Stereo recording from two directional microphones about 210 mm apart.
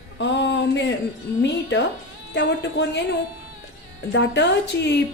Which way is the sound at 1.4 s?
60° left (ahead or behind).